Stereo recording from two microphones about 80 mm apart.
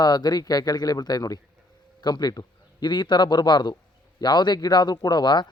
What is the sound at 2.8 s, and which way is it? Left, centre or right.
A man's voice, left.